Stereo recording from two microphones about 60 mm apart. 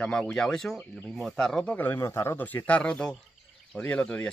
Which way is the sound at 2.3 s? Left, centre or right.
Left.